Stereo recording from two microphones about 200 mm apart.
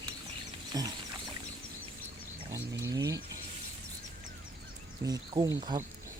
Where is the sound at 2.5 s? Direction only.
15° right (ahead or behind).